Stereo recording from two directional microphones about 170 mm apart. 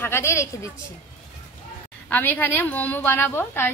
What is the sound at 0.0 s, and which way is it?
Speech, 15° left (ahead or behind).